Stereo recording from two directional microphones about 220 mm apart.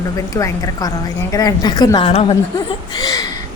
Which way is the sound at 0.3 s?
15° left (ahead or behind).